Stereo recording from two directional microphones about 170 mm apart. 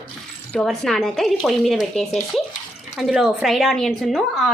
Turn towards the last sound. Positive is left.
turn(degrees=0)  # may be behind; listen again after turning